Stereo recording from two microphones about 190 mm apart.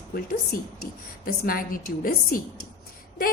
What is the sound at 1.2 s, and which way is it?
A woman's voice, 50° left (ahead or behind).